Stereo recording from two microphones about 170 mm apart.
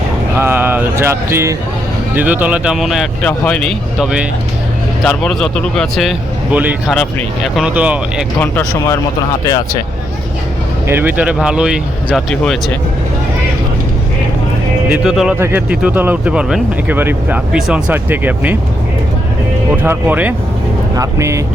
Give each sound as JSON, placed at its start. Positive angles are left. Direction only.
{"t": 0.3, "sound": "speech", "side_deg": -10}
{"t": 6.9, "sound": "speech", "side_deg": 5}
{"t": 10.8, "sound": "speech", "side_deg": -10}
{"t": 14.8, "sound": "speech", "side_deg": -5}
{"t": 19.8, "sound": "speech", "side_deg": -10}